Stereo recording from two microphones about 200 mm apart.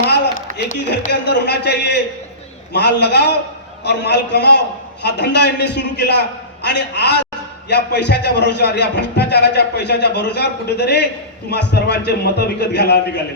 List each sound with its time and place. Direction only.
1.1 s a man's voice: 60° left (ahead or behind)